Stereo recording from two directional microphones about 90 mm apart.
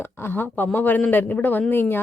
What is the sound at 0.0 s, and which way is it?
A woman's voice, 25° left (ahead or behind).